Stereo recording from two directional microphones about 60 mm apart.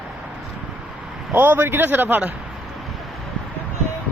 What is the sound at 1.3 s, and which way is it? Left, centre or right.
A man's voice, right.